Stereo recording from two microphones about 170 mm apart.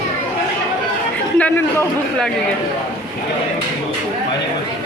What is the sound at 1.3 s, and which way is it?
Speech, 10° left (ahead or behind).